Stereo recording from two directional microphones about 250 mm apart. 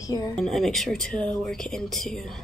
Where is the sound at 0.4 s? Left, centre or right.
Centre.